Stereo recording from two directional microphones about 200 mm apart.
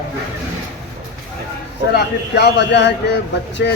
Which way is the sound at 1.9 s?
55° left (ahead or behind).